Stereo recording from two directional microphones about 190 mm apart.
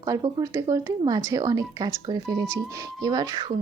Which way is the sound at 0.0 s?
20° right (ahead or behind).